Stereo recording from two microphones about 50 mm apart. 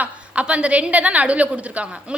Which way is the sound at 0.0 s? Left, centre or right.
Right.